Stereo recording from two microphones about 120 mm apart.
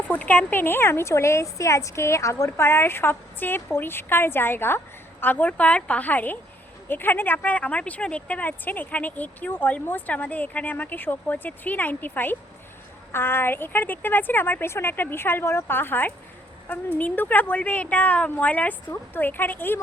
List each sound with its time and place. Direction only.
0.1 s a woman's voice: 15° left (ahead or behind)